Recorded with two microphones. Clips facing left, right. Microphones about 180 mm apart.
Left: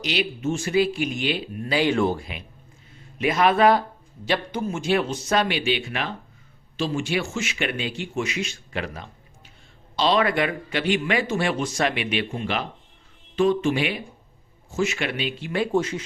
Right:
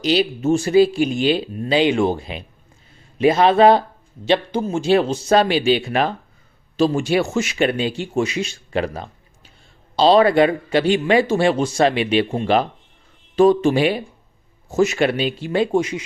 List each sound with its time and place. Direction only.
0.0 s speech: 35° right (ahead or behind)
15.7 s speech: 15° right (ahead or behind)